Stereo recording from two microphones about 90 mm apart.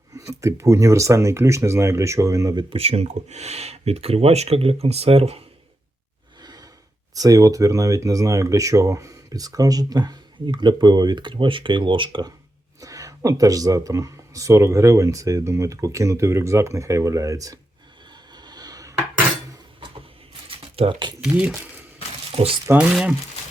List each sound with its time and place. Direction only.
0.2 s speech: 35° right (ahead or behind)
2.6 s speech: 90° right
4.1 s speech: 90° right
6.4 s gasp: 45° right (ahead or behind)
7.1 s speech: 40° right (ahead or behind)
10.4 s speech: 55° right (ahead or behind)
12.8 s speech: 40° right (ahead or behind)
18.3 s a sound: 50° right (ahead or behind)
20.7 s speech: 90° right
21.2 s speech: 10° right (ahead or behind)
22.4 s speech: 90° right